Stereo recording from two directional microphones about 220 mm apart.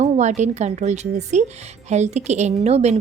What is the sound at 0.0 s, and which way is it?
A woman's voice, 30° right (ahead or behind).